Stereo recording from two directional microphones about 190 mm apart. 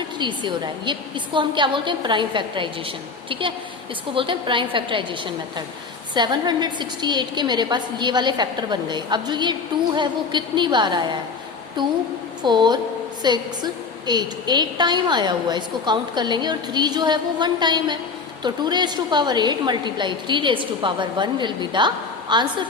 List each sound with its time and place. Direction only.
0.2 s a woman's voice: 25° right (ahead or behind)
4.1 s a woman's voice: 25° right (ahead or behind)